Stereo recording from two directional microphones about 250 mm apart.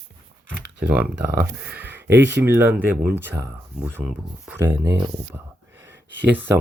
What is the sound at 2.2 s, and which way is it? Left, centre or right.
Speech, right.